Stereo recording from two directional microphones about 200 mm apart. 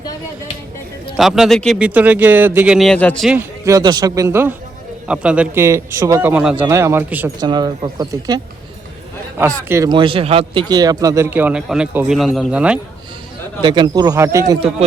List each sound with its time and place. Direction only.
1.1 s speech: centre (ahead or behind)
3.2 s a man's voice: 15° right (ahead or behind)
7.3 s speech: 20° right (ahead or behind)
9.6 s a man's voice: 15° right (ahead or behind)
13.6 s speech: 20° right (ahead or behind)